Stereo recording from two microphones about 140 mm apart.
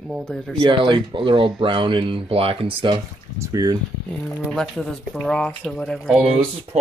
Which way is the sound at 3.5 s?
30° right (ahead or behind).